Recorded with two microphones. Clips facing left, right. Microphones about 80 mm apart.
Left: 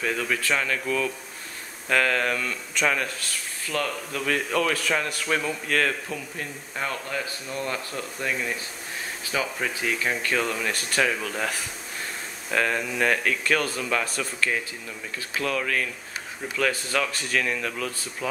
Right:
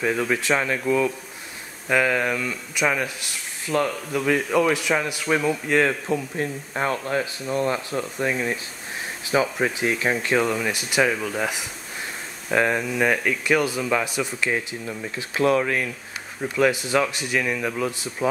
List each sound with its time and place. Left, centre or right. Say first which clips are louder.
0.0 s speech: right 4 dB; centre
4.2 s speech: right 5 dB; centre; by 7.2 s right
7.5 s speech: right 7 dB; centre